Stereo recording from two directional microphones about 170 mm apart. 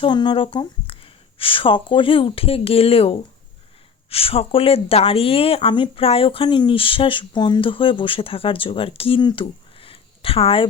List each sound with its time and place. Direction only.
0.0 s speech: 25° left (ahead or behind)